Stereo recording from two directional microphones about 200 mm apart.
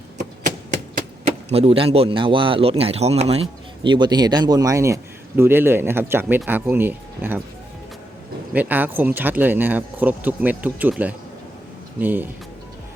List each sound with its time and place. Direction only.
1.2 s speech: 30° right (ahead or behind); by 7.3 s 10° right (ahead or behind)
8.5 s speech: 10° right (ahead or behind)